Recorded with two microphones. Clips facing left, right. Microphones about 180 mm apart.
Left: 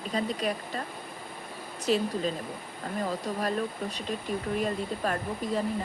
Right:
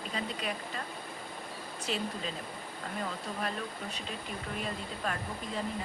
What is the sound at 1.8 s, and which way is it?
Speech, 40° left (ahead or behind).